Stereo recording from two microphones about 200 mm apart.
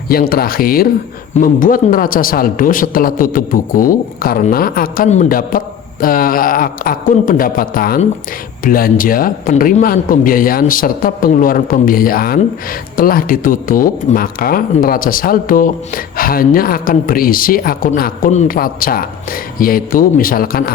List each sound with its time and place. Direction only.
0.1 s speech: 50° left (ahead or behind)